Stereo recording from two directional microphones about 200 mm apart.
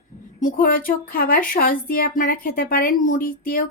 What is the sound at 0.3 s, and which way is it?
Speech, 45° left (ahead or behind).